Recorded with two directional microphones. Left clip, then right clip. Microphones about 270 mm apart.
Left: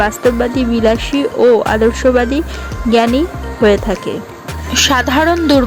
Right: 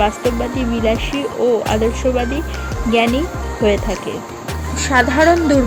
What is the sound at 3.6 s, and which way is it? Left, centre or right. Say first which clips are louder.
Speech: left 5 dB; centre.